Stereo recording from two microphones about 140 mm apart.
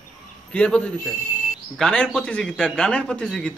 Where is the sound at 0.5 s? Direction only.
10° left (ahead or behind).